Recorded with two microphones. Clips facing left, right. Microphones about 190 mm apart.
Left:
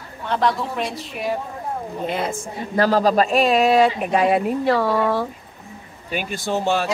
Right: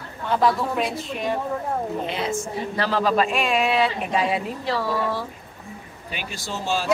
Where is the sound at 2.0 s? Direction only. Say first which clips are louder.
Left 2 dB; 50° left (ahead or behind).